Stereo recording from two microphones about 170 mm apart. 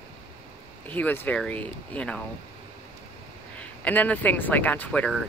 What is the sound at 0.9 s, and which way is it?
Speech, 10° left (ahead or behind).